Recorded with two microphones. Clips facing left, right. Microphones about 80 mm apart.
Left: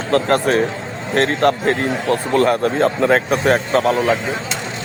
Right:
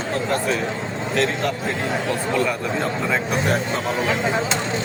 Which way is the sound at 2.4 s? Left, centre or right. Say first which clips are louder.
Left 7 dB; left.